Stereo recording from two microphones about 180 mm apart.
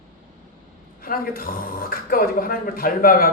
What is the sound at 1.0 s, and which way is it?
A man's voice, 55° left (ahead or behind).